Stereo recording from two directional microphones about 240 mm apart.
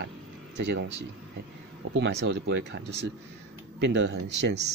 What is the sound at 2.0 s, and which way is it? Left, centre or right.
Speech, right.